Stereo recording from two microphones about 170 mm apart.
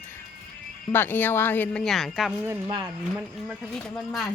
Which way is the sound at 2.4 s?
15° right (ahead or behind).